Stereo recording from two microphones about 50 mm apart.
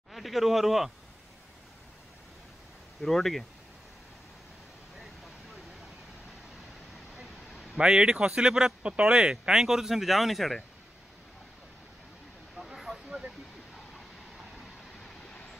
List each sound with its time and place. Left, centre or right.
0.1 s speech: centre
3.0 s speech: centre
4.9 s vehicle: centre
7.8 s speech: centre
9.5 s speech: centre
12.5 s vehicle: centre